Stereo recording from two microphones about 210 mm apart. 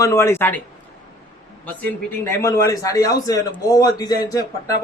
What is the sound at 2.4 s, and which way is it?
A man's voice, 15° left (ahead or behind).